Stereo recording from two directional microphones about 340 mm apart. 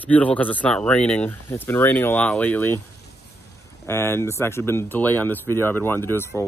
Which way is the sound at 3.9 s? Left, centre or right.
Centre.